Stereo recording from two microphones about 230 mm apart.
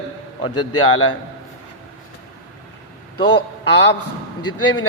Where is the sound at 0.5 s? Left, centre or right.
Left.